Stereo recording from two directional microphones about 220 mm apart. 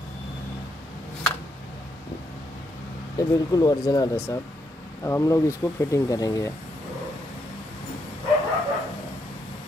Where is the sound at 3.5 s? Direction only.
15° left (ahead or behind).